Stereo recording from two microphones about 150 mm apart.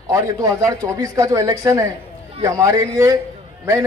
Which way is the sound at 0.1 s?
20° right (ahead or behind).